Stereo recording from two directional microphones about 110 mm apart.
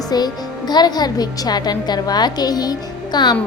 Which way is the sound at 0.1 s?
35° left (ahead or behind).